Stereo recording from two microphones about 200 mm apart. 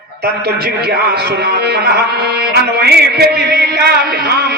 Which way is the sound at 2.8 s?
55° right (ahead or behind).